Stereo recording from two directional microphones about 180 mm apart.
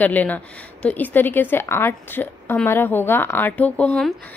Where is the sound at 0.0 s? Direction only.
10° left (ahead or behind).